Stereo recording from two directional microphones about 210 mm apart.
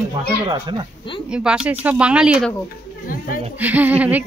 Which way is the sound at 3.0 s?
40° left (ahead or behind).